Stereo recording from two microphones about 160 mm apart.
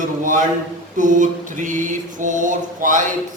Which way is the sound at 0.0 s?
55° right (ahead or behind).